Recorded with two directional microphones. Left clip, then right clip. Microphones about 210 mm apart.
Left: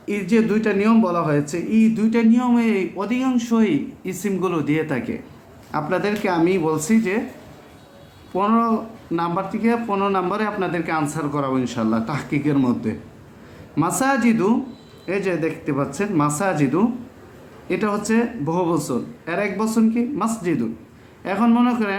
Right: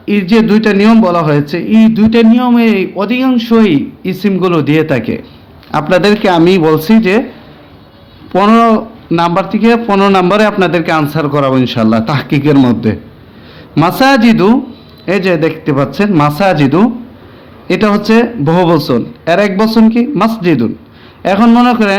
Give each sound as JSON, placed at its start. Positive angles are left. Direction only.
{"t": 0.0, "sound": "a man's voice", "side_deg": -45}
{"t": 8.4, "sound": "a man's voice", "side_deg": -40}